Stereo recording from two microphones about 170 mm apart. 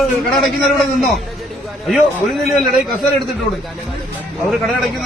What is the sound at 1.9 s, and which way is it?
Speech, centre (ahead or behind).